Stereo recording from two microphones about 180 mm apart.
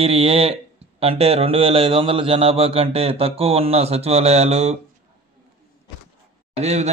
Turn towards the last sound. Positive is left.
turn(degrees=-40)  # may be behind; listen again after turning